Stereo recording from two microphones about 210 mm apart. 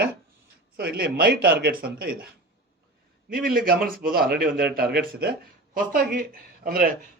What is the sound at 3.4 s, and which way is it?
A man's voice, 45° right (ahead or behind).